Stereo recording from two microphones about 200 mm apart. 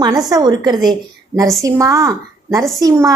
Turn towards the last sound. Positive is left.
turn(degrees=-15)  # may be behind; listen again after turning